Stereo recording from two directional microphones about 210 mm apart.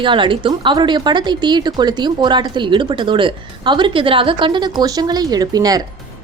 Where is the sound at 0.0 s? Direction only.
25° right (ahead or behind).